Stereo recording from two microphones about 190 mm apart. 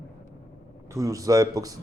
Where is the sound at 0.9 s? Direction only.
15° right (ahead or behind).